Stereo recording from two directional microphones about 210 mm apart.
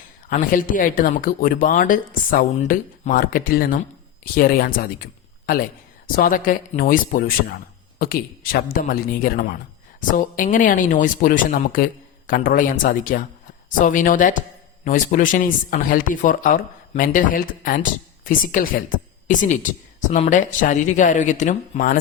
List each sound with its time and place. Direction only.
0.3 s a woman's voice: 40° left (ahead or behind)
6.1 s a woman's voice: 40° left (ahead or behind)